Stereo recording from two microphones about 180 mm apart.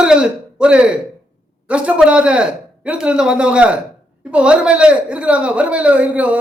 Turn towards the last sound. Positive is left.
turn(degrees=-5)  # may be behind; listen again after turning